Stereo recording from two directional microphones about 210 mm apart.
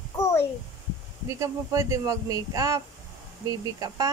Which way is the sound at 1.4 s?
15° right (ahead or behind).